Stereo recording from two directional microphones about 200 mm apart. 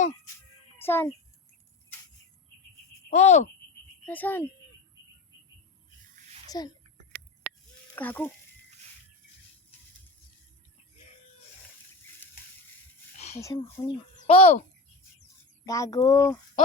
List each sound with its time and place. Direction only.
0.8 s a child's voice: 10° left (ahead or behind)
3.1 s speech: 35° left (ahead or behind)
4.0 s speech: 10° left (ahead or behind)
6.5 s a child's voice: 20° left (ahead or behind)
7.9 s speech: 10° left (ahead or behind)
13.3 s speech: 15° left (ahead or behind)
14.2 s a sound: 30° left (ahead or behind)
15.6 s speech: 15° left (ahead or behind)